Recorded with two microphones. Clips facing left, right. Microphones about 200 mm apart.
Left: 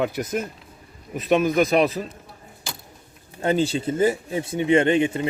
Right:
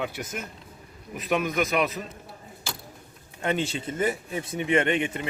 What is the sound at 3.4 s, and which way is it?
Speech, 35° left (ahead or behind).